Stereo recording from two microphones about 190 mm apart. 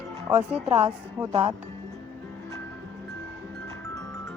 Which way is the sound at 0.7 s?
30° right (ahead or behind).